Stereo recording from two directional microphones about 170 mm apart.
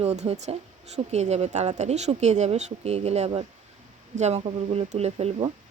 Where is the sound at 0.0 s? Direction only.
40° right (ahead or behind).